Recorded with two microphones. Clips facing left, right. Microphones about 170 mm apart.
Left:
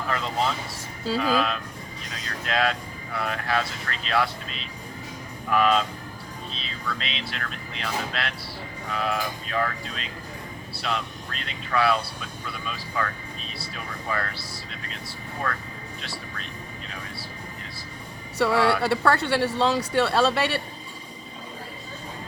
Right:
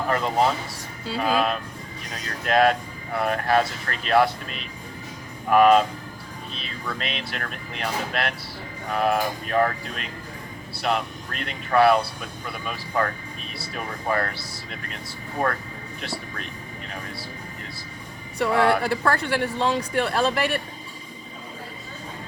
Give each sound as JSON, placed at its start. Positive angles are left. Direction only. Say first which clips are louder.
{"t": 0.1, "sound": "speech", "louder": "right 5 dB", "side_deg": -50}
{"t": 7.0, "sound": "speech", "louder": "right 3 dB", "side_deg": -50}
{"t": 10.8, "sound": "speech", "louder": "right 5 dB", "side_deg": -55}
{"t": 18.4, "sound": "speech", "louder": "right 1 dB", "side_deg": 30}